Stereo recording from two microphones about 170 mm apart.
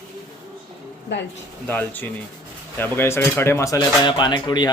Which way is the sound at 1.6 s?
10° left (ahead or behind).